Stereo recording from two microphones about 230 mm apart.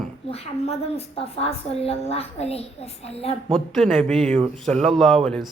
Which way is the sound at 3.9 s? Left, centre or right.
Centre.